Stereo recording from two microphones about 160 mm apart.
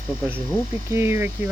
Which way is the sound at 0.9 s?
15° right (ahead or behind).